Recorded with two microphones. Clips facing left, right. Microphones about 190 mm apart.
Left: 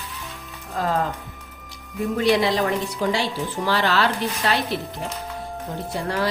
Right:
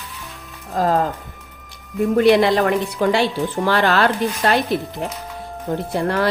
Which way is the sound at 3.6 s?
55° right (ahead or behind).